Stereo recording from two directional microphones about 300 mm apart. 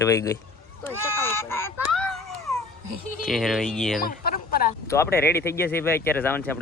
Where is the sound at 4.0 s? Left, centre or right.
Left.